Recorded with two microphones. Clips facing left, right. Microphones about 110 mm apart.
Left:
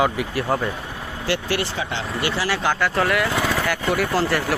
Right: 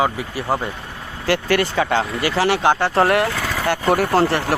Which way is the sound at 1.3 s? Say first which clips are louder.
Right 5 dB; 50° right (ahead or behind).